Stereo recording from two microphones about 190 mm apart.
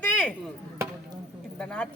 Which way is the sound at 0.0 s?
5° left (ahead or behind).